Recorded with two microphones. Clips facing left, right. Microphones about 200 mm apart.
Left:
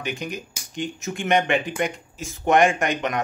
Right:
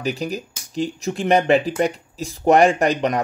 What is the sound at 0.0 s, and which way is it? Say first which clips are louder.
Speech: right 5 dB; 40° right (ahead or behind).